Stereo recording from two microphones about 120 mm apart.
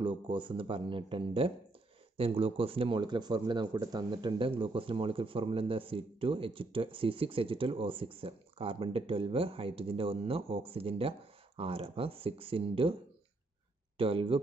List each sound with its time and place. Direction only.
0.0 s speech: 45° right (ahead or behind)
13.9 s speech: 50° right (ahead or behind)